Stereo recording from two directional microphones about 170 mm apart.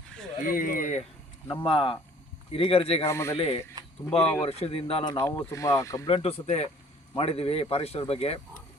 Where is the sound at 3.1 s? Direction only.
15° left (ahead or behind).